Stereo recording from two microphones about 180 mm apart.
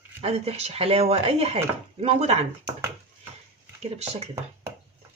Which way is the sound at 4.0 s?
35° right (ahead or behind).